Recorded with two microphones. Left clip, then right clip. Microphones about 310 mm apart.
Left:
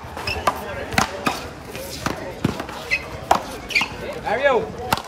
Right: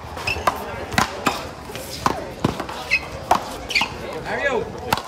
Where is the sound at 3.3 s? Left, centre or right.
Centre.